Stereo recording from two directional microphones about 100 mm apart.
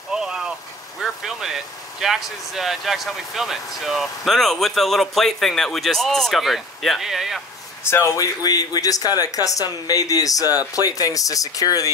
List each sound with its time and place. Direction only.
0.1 s a sound: 5° right (ahead or behind)
1.0 s speech: 5° right (ahead or behind)
7.9 s speech: 30° left (ahead or behind)